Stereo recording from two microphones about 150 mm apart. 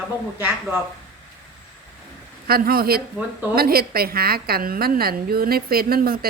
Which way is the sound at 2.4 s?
90° right.